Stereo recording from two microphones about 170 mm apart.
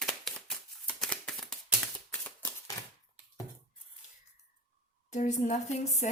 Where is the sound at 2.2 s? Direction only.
10° left (ahead or behind).